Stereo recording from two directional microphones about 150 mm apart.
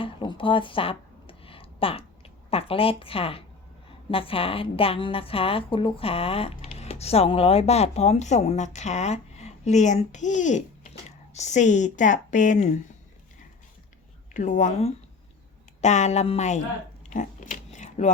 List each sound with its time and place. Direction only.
0.0 s a sound: 30° left (ahead or behind)
4.1 s a woman's voice: 40° left (ahead or behind); by 12.7 s 55° left (ahead or behind)
14.3 s a woman's voice: 55° left (ahead or behind)
17.0 s biting: 55° left (ahead or behind)